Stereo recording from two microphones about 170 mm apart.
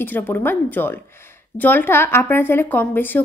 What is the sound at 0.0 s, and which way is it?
A woman's voice, 10° left (ahead or behind).